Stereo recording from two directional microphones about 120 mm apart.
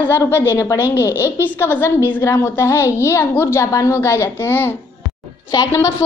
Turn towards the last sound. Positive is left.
turn(degrees=30)  # may be behind; listen again after turning